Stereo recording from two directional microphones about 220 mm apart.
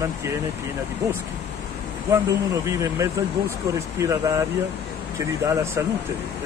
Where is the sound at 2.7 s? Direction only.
10° right (ahead or behind).